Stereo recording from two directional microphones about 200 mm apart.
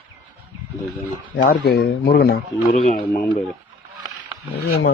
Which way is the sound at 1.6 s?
55° left (ahead or behind).